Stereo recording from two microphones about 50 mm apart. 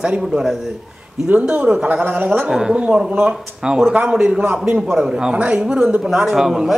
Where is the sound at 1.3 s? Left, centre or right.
Right.